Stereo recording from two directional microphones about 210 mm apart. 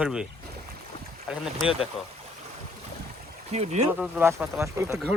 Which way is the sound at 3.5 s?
30° right (ahead or behind).